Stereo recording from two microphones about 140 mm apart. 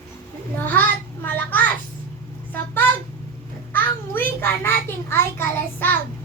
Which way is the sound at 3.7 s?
15° left (ahead or behind).